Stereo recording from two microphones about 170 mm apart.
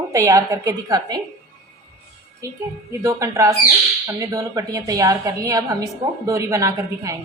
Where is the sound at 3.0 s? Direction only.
20° right (ahead or behind).